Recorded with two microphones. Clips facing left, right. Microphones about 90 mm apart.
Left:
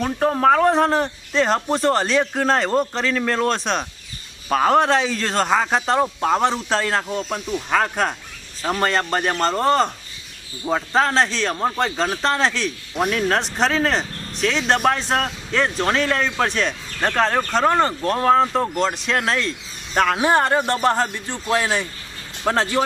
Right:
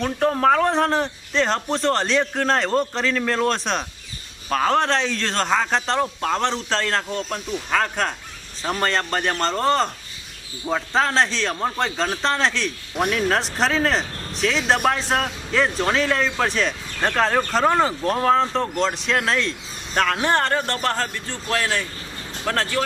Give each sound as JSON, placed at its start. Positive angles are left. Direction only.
{"t": 0.0, "sound": "a man's voice", "side_deg": 5}